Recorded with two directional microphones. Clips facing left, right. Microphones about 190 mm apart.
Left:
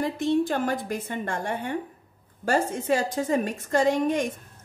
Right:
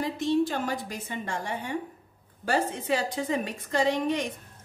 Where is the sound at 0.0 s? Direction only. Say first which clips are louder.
Left 2 dB; 55° left (ahead or behind).